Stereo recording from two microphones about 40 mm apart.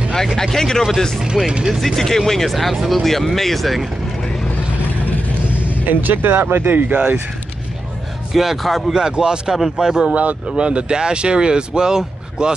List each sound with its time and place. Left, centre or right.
0.4 s speech: centre
1.2 s speech: centre
2.0 s speech: centre
5.5 s speech: right
8.3 s speech: centre
8.8 s speech: centre
10.4 s speech: right